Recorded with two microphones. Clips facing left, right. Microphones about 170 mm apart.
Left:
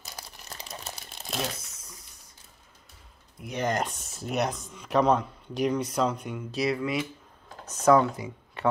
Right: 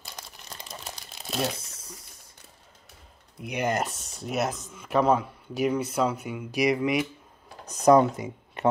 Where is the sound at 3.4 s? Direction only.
10° right (ahead or behind).